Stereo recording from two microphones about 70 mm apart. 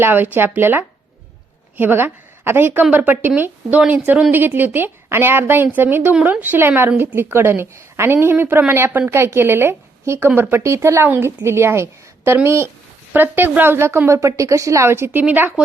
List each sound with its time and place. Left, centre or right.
0.0 s a woman's voice: right
13.1 s a woman's voice: right
15.2 s a woman's voice: right